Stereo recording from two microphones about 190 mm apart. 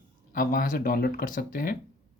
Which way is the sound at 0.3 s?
45° left (ahead or behind).